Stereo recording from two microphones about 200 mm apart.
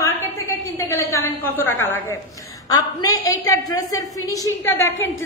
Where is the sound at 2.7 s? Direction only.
20° left (ahead or behind).